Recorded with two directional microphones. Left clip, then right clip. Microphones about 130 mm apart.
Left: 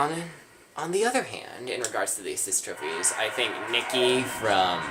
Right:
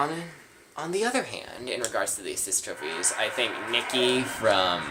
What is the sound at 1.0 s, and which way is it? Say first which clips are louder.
Speech: left 1 dB; 15° right (ahead or behind).